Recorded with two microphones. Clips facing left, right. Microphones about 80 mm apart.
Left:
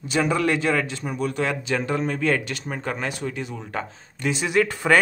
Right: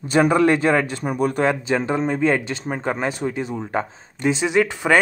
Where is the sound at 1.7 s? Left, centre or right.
Right.